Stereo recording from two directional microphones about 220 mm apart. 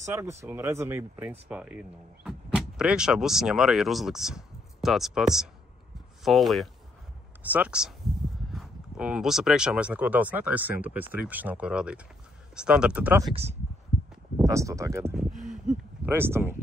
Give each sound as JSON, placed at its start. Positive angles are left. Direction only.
{"t": 0.0, "sound": "speech", "side_deg": -15}
{"t": 13.3, "sound": "speech", "side_deg": -30}
{"t": 14.4, "sound": "speech", "side_deg": -15}
{"t": 15.4, "sound": "a sound", "side_deg": 0}